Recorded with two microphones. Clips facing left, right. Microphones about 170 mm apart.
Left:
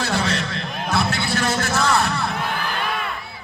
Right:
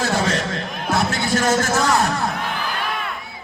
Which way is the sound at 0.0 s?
45° right (ahead or behind).